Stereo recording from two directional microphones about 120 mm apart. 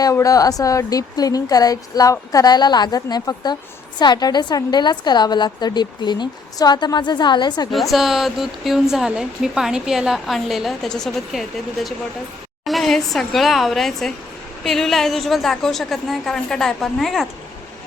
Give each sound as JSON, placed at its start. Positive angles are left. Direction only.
{"t": 0.0, "sound": "a woman's voice", "side_deg": 30}
{"t": 7.7, "sound": "a woman's voice", "side_deg": 0}